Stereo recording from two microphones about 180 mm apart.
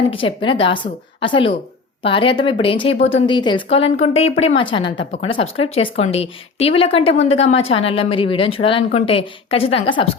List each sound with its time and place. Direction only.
0.1 s a woman's voice: 30° left (ahead or behind)